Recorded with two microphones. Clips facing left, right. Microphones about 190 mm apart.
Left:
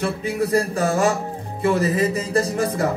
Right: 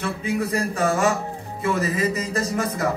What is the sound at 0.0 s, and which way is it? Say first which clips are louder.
A man's voice: left 2 dB; 35° left (ahead or behind).